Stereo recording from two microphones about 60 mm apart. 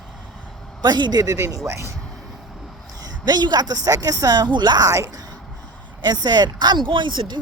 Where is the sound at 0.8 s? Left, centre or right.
Right.